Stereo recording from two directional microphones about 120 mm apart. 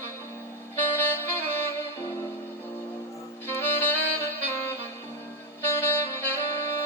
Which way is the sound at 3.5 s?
20° left (ahead or behind).